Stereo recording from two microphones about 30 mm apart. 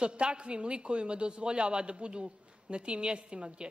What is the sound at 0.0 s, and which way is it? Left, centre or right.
A woman's voice, right.